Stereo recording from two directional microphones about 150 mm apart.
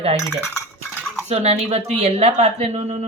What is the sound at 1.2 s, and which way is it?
Speech, 45° right (ahead or behind).